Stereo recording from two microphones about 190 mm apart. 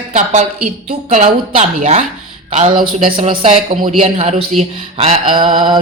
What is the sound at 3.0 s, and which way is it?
A man's voice, 30° right (ahead or behind).